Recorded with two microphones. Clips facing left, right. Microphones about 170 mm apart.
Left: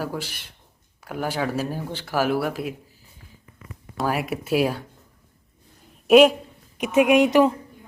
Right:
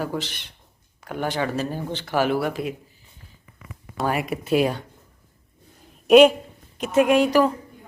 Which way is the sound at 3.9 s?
Centre (ahead or behind).